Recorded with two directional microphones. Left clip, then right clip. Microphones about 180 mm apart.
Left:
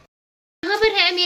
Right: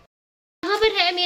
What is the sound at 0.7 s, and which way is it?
Speech, centre (ahead or behind).